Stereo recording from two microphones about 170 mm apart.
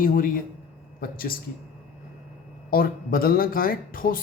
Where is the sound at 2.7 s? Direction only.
60° left (ahead or behind).